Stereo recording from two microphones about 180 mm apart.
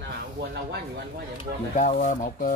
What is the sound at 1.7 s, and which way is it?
Speech, 45° left (ahead or behind).